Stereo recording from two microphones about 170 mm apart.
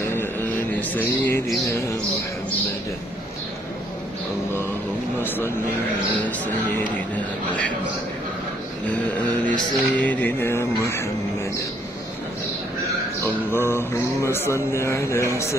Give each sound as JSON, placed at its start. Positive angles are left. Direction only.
{"t": 0.1, "sound": "a sound", "side_deg": 10}
{"t": 8.8, "sound": "mantra", "side_deg": 10}
{"t": 13.5, "sound": "mantra", "side_deg": 15}